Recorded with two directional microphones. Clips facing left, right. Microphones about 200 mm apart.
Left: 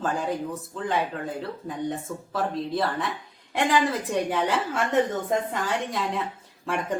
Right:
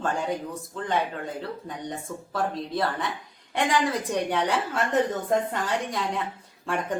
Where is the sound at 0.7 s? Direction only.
Centre (ahead or behind).